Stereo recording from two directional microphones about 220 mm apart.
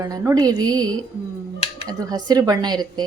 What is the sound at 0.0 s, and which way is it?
A woman's voice, 15° right (ahead or behind).